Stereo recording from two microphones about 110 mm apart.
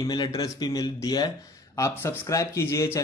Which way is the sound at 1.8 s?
25° left (ahead or behind).